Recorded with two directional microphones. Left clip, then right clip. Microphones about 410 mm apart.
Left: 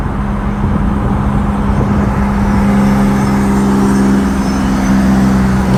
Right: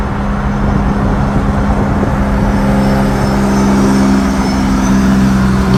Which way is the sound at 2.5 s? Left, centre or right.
Right.